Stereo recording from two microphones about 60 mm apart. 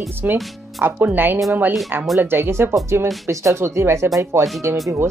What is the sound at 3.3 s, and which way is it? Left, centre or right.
Speech, right.